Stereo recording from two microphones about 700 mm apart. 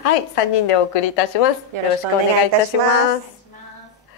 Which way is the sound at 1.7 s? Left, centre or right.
Right.